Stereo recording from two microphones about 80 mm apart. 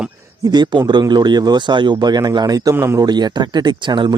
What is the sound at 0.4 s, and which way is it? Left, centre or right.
Speech, right.